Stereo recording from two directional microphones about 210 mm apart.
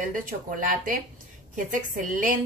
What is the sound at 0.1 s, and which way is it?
Speech, 40° right (ahead or behind).